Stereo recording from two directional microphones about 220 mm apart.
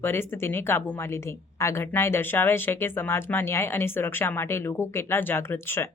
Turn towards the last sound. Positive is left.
turn(degrees=10)  # may be behind; listen again after turning